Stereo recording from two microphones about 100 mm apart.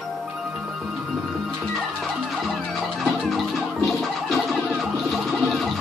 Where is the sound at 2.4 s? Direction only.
Centre (ahead or behind).